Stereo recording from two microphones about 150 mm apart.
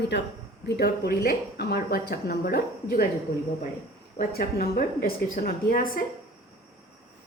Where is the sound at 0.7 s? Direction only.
90° left.